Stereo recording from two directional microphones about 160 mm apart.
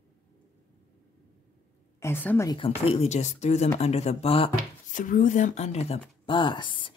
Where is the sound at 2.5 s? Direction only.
35° left (ahead or behind).